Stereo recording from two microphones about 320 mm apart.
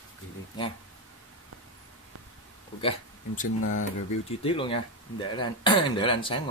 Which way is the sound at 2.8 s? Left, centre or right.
Centre.